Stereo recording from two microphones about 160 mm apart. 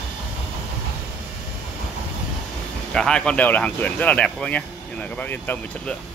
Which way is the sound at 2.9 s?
5° left (ahead or behind).